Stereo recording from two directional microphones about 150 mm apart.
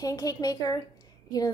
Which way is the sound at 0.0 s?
25° left (ahead or behind).